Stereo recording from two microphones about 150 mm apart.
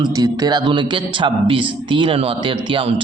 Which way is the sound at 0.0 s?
25° right (ahead or behind).